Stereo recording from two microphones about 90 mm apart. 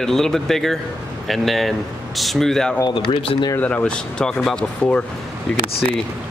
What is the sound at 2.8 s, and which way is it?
Speech, 65° left (ahead or behind).